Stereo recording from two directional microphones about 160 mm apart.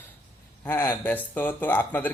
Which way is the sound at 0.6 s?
15° left (ahead or behind).